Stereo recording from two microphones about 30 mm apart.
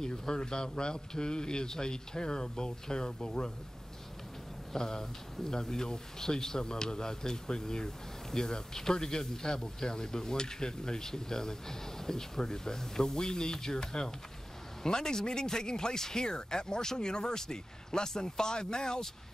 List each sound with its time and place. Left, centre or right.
0.0 s speech: left
4.7 s speech: centre